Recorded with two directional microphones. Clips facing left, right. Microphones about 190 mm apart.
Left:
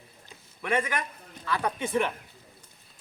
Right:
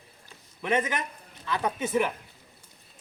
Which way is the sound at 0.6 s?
20° right (ahead or behind).